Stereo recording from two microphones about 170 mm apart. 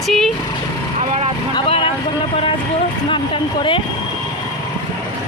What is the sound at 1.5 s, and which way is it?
Speech, 30° left (ahead or behind).